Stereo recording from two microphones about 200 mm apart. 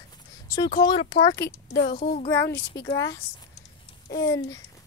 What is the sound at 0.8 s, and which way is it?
Speech, 25° left (ahead or behind).